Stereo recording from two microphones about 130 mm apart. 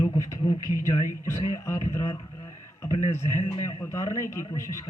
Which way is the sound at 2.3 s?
25° left (ahead or behind).